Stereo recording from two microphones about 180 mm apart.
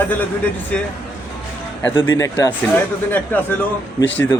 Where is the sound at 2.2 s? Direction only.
15° left (ahead or behind).